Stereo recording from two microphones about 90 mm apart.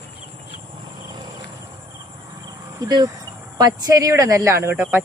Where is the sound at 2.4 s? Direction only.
50° right (ahead or behind).